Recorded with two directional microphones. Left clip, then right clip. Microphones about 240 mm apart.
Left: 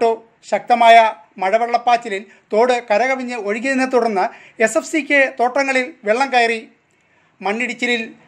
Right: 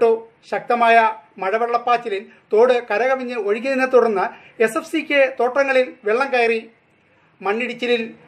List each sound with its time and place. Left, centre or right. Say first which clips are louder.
0.0 s speech: right 1 dB; left